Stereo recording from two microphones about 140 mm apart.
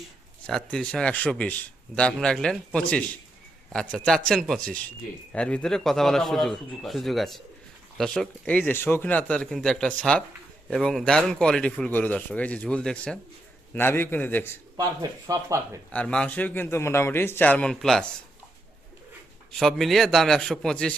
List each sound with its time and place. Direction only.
0.4 s a man's voice: 5° left (ahead or behind)
14.8 s speech: 25° right (ahead or behind)
15.9 s speech: 5° left (ahead or behind)
19.5 s a man's voice: centre (ahead or behind)